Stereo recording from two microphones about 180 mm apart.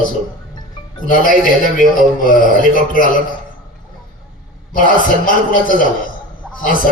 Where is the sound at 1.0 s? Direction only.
50° left (ahead or behind).